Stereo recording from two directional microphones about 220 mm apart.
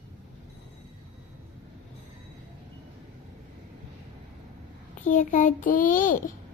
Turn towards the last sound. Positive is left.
turn(degrees=40)  # may be behind; listen again after turning